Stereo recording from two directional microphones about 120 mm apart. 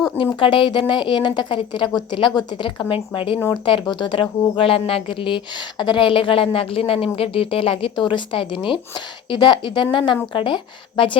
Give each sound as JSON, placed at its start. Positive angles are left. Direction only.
{"t": 0.3, "sound": "a woman's voice", "side_deg": 45}